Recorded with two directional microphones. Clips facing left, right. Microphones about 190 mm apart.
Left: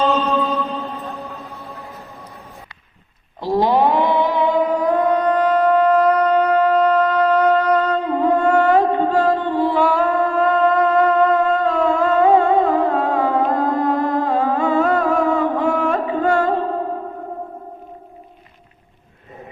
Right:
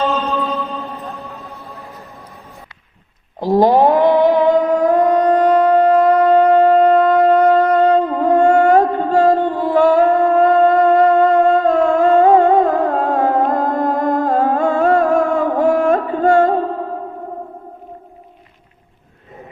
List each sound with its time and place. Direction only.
0.1 s music: centre (ahead or behind)
3.4 s music: 45° right (ahead or behind)
15.5 s carnatic music: 45° right (ahead or behind)